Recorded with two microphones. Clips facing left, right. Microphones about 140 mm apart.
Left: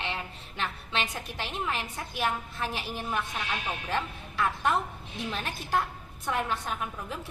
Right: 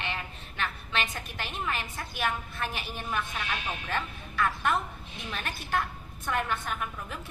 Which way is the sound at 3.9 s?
20° left (ahead or behind).